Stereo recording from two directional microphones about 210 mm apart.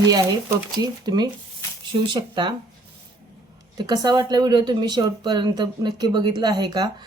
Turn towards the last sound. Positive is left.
turn(degrees=-20)  # may be behind; listen again after turning